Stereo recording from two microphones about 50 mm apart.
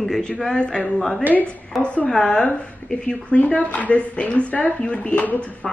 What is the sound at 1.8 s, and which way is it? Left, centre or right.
Speech, left.